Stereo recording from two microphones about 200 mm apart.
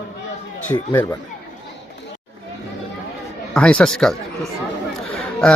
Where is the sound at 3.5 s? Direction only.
5° left (ahead or behind).